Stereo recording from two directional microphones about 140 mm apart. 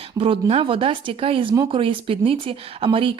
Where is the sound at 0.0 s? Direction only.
40° right (ahead or behind).